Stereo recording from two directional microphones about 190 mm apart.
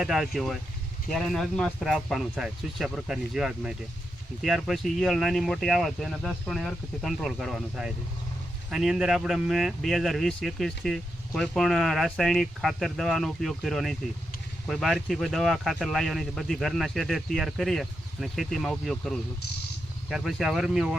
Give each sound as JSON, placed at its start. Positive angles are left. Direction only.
{"t": 0.0, "sound": "speech", "side_deg": 0}